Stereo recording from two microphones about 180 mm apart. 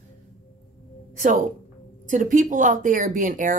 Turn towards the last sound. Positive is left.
turn(degrees=-50)  # may be behind; listen again after turning